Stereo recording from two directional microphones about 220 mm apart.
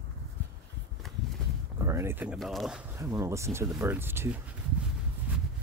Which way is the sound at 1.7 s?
15° right (ahead or behind).